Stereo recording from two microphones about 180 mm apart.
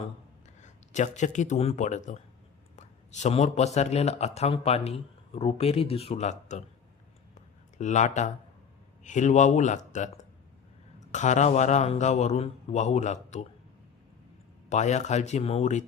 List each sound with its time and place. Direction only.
0.6 s speech: 40° left (ahead or behind)
7.3 s a sound: 40° left (ahead or behind)
9.0 s speech: 45° left (ahead or behind)
11.1 s speech: 40° left (ahead or behind)
14.7 s speech: 40° left (ahead or behind)